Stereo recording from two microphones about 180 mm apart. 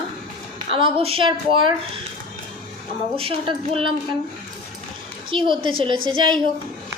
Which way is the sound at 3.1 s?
30° right (ahead or behind).